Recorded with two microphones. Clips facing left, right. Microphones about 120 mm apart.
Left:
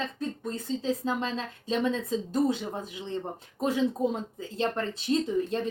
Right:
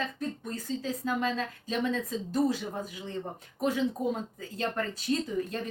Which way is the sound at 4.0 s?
30° left (ahead or behind).